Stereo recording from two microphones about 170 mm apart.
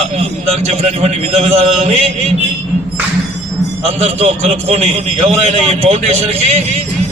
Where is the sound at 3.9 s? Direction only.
40° right (ahead or behind).